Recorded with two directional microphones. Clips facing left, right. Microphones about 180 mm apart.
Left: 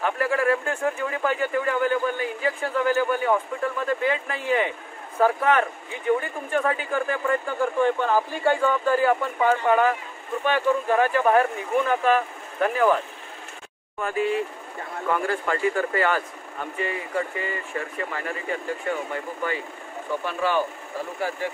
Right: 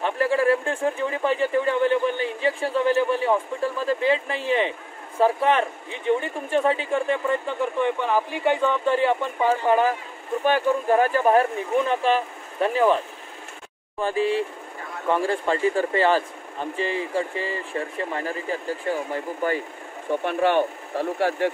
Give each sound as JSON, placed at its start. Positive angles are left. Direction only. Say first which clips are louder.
{"t": 0.0, "sound": "a sound", "louder": "right 2 dB", "side_deg": -30}
{"t": 5.2, "sound": "speech", "louder": "right 1 dB", "side_deg": -25}
{"t": 20.2, "sound": "speech", "louder": "right 4 dB", "side_deg": -60}